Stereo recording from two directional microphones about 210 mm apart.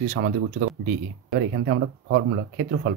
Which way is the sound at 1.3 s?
55° right (ahead or behind).